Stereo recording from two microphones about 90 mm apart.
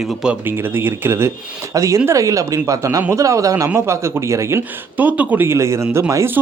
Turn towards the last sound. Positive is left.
turn(degrees=-30)  # may be behind; listen again after turning